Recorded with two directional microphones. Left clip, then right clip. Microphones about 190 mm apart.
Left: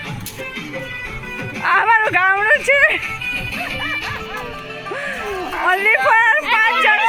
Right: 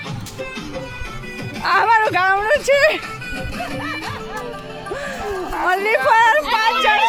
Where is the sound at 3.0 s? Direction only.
35° right (ahead or behind).